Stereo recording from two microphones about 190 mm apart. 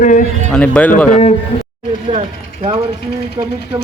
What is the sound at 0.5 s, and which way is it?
Speech, 5° left (ahead or behind).